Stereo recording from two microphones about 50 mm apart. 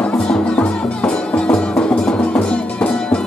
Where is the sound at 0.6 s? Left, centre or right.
Left.